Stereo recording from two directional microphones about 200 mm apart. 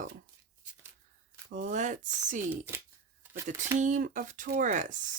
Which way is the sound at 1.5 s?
40° right (ahead or behind).